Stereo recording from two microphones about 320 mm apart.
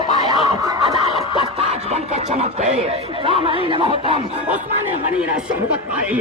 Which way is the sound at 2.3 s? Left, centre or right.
Centre.